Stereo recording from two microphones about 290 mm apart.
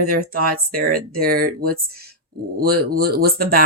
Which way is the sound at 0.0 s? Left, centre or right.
Right.